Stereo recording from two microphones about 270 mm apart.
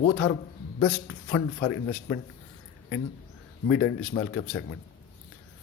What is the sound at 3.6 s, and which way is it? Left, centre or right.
A man's voice, left.